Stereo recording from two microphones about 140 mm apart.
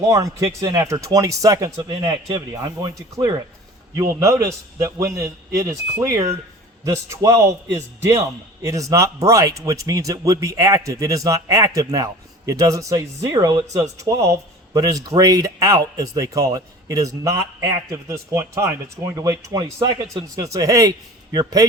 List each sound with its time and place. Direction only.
0.1 s a man's voice: 25° right (ahead or behind)